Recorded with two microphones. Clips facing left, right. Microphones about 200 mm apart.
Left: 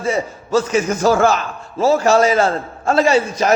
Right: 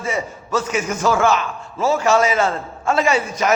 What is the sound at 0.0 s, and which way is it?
A man's voice, 35° left (ahead or behind).